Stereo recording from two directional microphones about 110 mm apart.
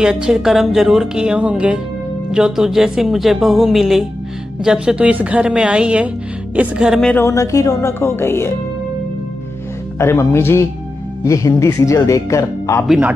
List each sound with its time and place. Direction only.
0.0 s a woman's voice: 5° right (ahead or behind)
7.2 s speech: 30° left (ahead or behind)
9.9 s speech: 25° left (ahead or behind)